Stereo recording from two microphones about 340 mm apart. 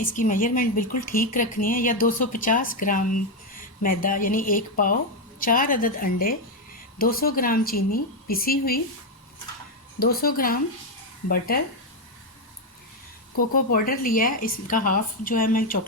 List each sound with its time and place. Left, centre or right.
0.0 s a woman's voice: left
10.0 s a woman's voice: left
13.3 s a woman's voice: left